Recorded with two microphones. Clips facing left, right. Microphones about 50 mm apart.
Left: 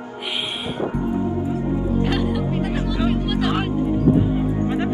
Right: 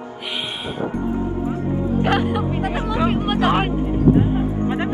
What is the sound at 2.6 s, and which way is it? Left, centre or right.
Speech, right.